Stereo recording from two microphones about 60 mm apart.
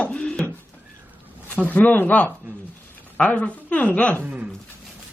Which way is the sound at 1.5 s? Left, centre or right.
Left.